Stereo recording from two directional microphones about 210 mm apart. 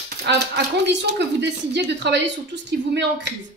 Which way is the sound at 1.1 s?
55° right (ahead or behind).